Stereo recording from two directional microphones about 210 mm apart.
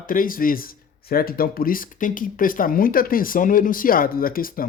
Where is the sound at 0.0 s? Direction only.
40° left (ahead or behind).